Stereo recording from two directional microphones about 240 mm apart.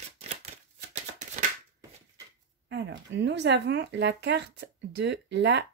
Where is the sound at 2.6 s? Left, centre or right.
Right.